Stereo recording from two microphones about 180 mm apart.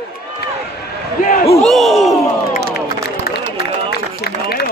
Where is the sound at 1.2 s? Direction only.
50° left (ahead or behind).